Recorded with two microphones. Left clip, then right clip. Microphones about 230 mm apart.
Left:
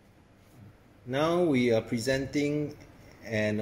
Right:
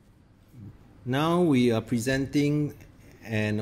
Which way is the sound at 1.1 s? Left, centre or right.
Right.